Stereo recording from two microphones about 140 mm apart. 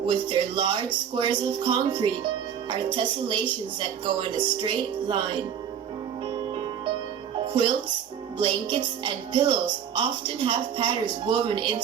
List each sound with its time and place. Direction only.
0.0 s speech: 35° right (ahead or behind)
7.4 s music: 35° right (ahead or behind)
8.4 s speech: 35° right (ahead or behind)